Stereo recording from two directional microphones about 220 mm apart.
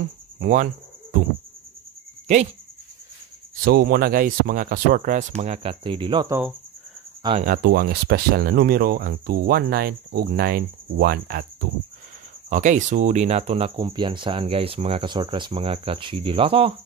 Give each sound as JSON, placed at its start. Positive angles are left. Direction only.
{"t": 0.4, "sound": "cricket", "side_deg": -35}
{"t": 3.6, "sound": "speech", "side_deg": -45}
{"t": 7.4, "sound": "speech", "side_deg": -40}
{"t": 12.4, "sound": "speech", "side_deg": -35}